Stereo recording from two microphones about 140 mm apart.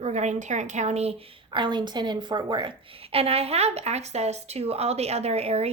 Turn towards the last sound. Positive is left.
turn(degrees=-50)  # may be behind; listen again after turning